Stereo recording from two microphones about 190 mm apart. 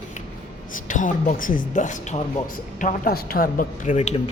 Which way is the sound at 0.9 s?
40° left (ahead or behind).